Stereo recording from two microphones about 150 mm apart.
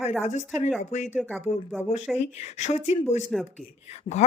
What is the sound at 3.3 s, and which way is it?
Speech, centre (ahead or behind).